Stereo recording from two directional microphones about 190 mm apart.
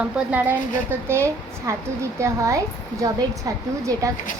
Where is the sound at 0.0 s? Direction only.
10° right (ahead or behind).